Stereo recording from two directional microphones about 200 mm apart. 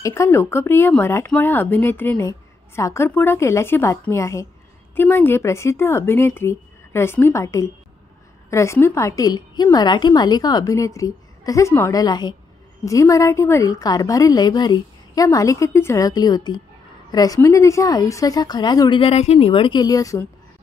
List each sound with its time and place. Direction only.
0.0 s speech: 15° left (ahead or behind)